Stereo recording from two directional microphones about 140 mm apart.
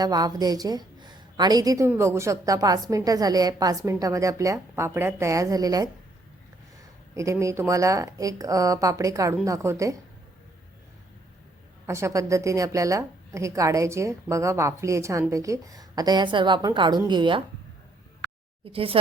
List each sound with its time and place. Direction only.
0.0 s a woman's voice: 30° right (ahead or behind)
7.1 s a woman's voice: 20° right (ahead or behind)
11.9 s a woman's voice: 20° right (ahead or behind)
18.6 s speech: 40° right (ahead or behind)